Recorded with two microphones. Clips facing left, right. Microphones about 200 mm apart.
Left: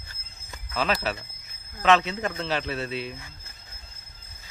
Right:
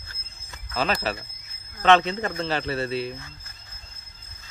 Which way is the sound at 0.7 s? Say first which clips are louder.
Right 1 dB; centre (ahead or behind).